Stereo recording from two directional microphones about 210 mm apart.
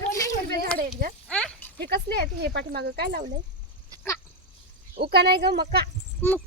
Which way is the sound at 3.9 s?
15° right (ahead or behind).